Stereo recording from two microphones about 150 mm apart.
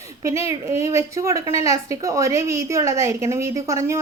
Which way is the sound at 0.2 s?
20° right (ahead or behind).